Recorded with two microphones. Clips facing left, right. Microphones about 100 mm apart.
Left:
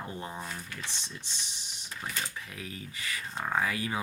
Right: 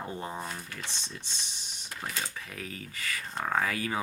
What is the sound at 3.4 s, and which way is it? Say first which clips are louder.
Speech: right 1 dB; 50° right (ahead or behind).